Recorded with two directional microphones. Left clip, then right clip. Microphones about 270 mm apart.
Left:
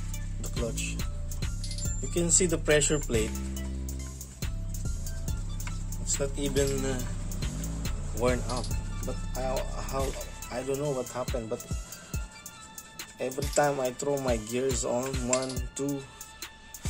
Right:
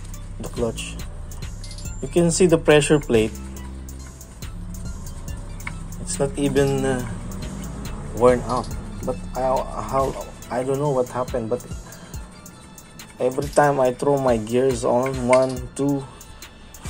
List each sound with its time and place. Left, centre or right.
0.4 s speech: centre
4.4 s music: centre
9.8 s speech: centre
11.5 s music: centre
13.2 s speech: centre